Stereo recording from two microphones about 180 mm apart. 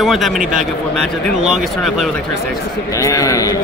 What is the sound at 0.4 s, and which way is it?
Speech, 45° right (ahead or behind).